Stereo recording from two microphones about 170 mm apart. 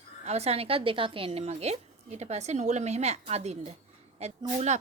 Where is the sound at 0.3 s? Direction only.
40° right (ahead or behind).